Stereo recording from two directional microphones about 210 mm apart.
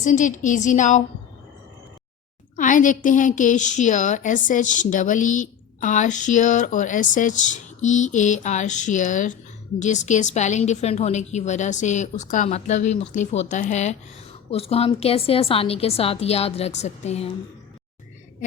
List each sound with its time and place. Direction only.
0.0 s a woman's voice: 35° left (ahead or behind)
2.6 s a woman's voice: 40° left (ahead or behind)